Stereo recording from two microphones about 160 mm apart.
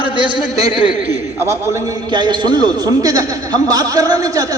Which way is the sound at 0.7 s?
5° right (ahead or behind).